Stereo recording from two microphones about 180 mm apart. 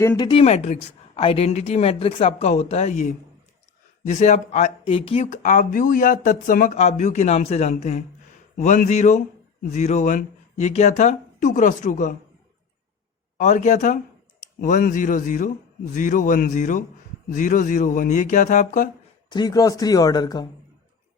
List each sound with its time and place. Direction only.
0.0 s speech: 15° left (ahead or behind)
0.3 s speech: 35° left (ahead or behind)
13.4 s speech: 40° left (ahead or behind)
19.3 s speech: 20° left (ahead or behind)